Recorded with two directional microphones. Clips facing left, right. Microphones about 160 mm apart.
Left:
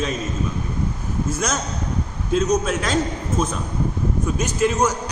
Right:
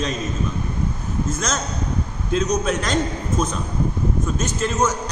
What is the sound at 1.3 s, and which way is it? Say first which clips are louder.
A man's voice: left 1 dB; 10° left (ahead or behind).